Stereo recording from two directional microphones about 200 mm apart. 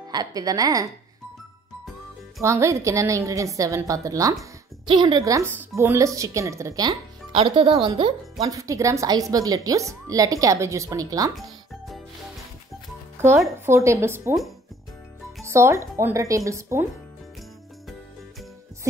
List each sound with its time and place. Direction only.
0.1 s a woman's voice: 20° right (ahead or behind)
2.4 s speech: 15° right (ahead or behind)
11.3 s music: centre (ahead or behind)
13.7 s speech: 15° right (ahead or behind)
15.4 s speech: 15° right (ahead or behind)